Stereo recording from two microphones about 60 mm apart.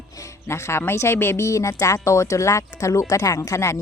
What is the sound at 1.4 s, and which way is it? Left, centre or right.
Speech, left.